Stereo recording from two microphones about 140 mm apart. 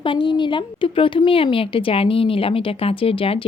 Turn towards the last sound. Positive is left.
turn(degrees=40)  # may be behind; listen again after turning